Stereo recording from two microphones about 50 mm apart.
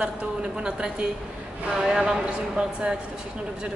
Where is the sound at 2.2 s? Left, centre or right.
Centre.